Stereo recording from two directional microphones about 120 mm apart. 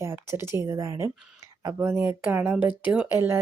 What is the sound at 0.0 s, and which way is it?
Speech, 20° right (ahead or behind).